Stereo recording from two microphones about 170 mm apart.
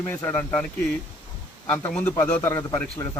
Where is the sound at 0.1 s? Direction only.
15° left (ahead or behind).